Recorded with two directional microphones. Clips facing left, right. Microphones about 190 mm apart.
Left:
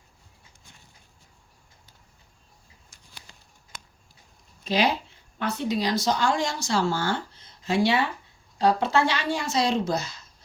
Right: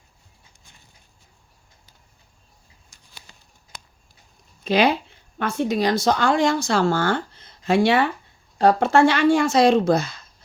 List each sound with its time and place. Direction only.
4.6 s a woman's voice: 60° right (ahead or behind)